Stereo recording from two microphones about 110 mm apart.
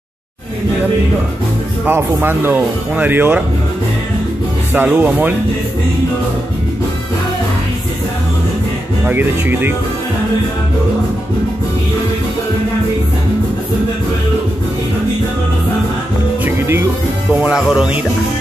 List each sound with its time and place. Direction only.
1.9 s speech: 20° right (ahead or behind)
4.7 s speech: 15° right (ahead or behind)
9.0 s speech: 15° right (ahead or behind)
16.4 s music: 20° right (ahead or behind)
17.3 s speech: 10° right (ahead or behind)